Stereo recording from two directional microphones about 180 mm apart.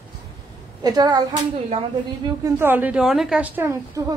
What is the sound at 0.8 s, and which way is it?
Speech, 20° right (ahead or behind).